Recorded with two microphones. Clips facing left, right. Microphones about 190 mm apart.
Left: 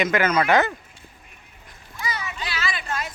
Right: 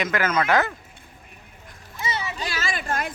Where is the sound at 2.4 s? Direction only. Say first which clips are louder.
Right 1 dB; 45° right (ahead or behind).